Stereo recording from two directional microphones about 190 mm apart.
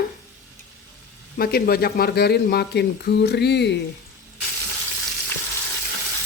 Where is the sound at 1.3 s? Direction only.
55° left (ahead or behind).